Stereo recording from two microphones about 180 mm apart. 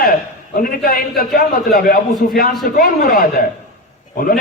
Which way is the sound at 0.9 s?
55° left (ahead or behind).